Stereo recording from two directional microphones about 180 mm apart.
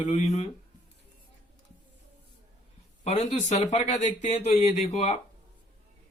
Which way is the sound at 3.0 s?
40° left (ahead or behind).